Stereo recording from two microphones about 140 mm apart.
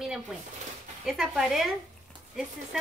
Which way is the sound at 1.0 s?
Centre (ahead or behind).